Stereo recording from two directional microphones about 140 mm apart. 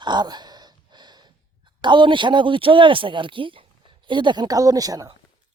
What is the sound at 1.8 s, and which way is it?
Speech, 35° right (ahead or behind).